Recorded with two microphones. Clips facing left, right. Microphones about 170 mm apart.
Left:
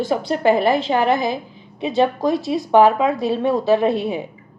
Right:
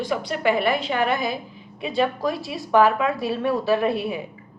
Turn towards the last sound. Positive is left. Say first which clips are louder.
# left 4 dB
turn(degrees=20)  # may be behind; listen again after turning